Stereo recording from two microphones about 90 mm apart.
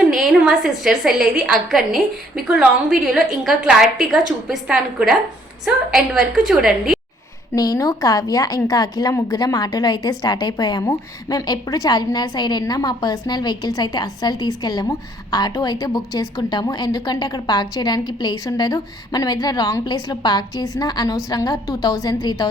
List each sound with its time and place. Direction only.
0.2 s a woman's voice: 5° right (ahead or behind)
7.5 s a woman's voice: 45° left (ahead or behind)